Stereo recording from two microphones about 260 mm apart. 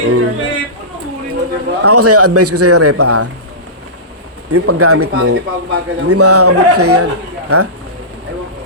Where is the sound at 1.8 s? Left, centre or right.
Right.